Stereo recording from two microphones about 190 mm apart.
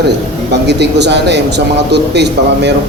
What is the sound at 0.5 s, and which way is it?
A man's voice, 65° right (ahead or behind).